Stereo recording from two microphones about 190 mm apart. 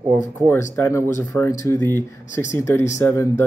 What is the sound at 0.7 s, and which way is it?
Speech, 15° left (ahead or behind).